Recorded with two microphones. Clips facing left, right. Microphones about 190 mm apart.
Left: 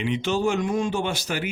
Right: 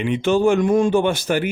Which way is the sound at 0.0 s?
55° right (ahead or behind).